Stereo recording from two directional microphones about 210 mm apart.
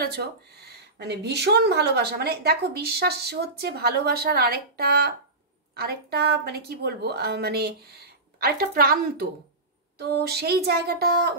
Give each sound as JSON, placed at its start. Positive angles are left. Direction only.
{"t": 0.0, "sound": "speech", "side_deg": -50}